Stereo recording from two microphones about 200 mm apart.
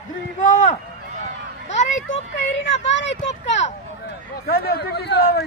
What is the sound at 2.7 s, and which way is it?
Speech, 65° left (ahead or behind).